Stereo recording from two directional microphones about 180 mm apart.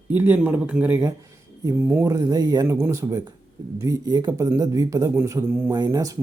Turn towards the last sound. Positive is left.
turn(degrees=-20)  # may be behind; listen again after turning